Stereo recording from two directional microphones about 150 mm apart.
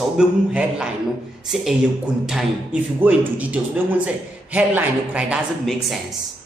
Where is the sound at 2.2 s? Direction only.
5° right (ahead or behind).